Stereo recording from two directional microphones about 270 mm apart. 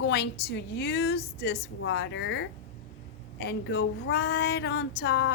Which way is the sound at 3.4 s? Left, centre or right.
Left.